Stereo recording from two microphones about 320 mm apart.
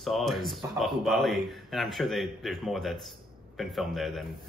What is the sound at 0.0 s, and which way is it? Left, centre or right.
Speech, centre.